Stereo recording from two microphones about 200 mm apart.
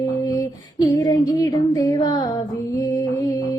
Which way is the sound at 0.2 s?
20° left (ahead or behind).